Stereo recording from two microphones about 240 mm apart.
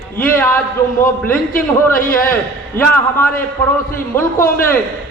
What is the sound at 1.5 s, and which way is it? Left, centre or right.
Speech, left.